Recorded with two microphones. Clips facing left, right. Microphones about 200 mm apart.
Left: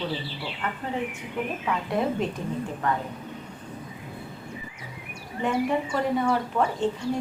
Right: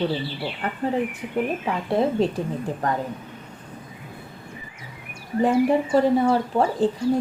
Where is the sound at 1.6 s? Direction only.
30° right (ahead or behind).